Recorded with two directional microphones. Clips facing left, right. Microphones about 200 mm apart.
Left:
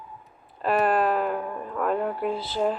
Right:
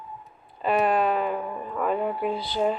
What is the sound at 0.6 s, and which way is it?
Speech, centre (ahead or behind).